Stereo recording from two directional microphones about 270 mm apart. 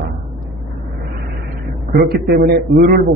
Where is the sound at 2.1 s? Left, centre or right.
Right.